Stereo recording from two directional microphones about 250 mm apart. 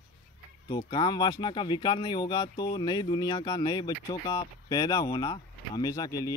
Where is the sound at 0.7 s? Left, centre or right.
Centre.